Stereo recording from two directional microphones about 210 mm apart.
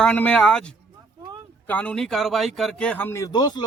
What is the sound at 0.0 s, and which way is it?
A man's voice, 5° left (ahead or behind).